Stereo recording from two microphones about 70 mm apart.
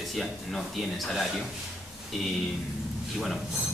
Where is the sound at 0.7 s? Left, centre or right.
Centre.